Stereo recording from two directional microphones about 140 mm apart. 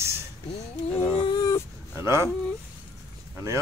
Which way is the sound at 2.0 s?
20° right (ahead or behind).